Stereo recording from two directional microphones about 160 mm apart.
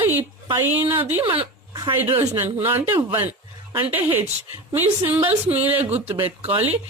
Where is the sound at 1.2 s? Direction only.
35° right (ahead or behind).